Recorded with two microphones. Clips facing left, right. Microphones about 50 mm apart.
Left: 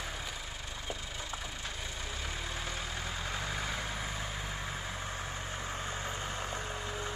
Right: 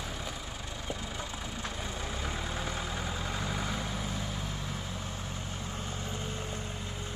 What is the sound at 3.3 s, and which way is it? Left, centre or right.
Vehicle, centre.